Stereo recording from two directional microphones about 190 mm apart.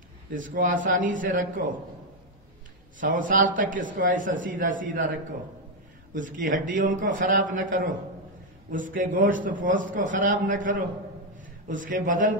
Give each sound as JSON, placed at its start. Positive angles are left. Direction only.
{"t": 0.3, "sound": "a man's voice", "side_deg": -45}
{"t": 3.0, "sound": "a man's voice", "side_deg": -45}
{"t": 6.1, "sound": "a man's voice", "side_deg": -45}